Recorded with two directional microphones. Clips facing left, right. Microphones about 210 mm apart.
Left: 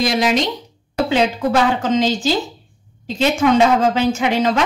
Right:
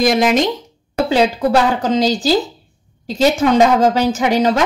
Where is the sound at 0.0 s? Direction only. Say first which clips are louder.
Right 4 dB; 50° right (ahead or behind).